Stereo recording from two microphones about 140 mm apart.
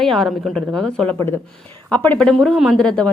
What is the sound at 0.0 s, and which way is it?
A woman's voice, centre (ahead or behind).